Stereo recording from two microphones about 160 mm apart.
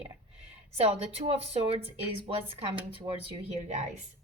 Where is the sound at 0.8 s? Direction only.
40° right (ahead or behind).